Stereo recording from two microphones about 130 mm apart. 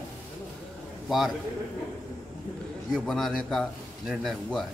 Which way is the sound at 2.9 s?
Centre (ahead or behind).